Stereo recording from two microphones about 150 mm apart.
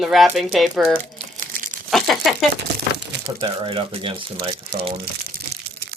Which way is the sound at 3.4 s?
35° right (ahead or behind).